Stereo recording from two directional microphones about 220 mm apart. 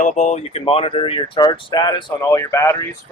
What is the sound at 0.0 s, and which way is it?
Speech, 35° left (ahead or behind).